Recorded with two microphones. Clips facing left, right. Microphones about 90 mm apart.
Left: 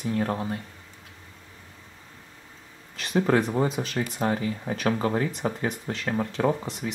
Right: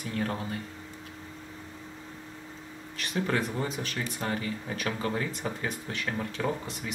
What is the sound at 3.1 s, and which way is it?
Speech, 25° left (ahead or behind).